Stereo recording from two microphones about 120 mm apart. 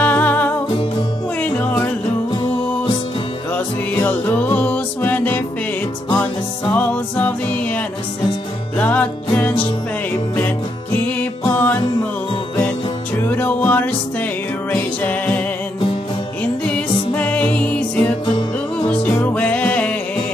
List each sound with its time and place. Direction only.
0.0 s music: 15° left (ahead or behind)
3.5 s music: 15° left (ahead or behind)
6.7 s music: 15° left (ahead or behind)
13.3 s music: 15° left (ahead or behind)
17.1 s music: 15° left (ahead or behind)